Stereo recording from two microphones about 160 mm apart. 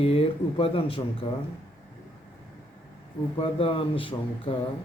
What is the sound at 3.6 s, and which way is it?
Speech, 35° left (ahead or behind).